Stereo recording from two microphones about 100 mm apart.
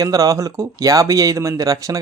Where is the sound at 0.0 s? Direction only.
35° right (ahead or behind).